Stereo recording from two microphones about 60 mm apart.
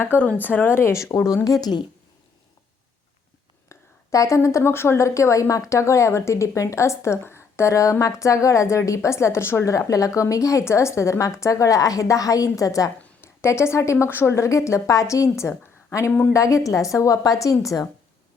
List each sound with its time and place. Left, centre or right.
0.0 s speech: left
3.7 s a sound: left
4.4 s a woman's voice: left
9.7 s a woman's voice: left
10.7 s a woman's voice: left
13.2 s a woman's voice: left
14.1 s a woman's voice: left
16.0 s speech: left
16.3 s a woman's voice: left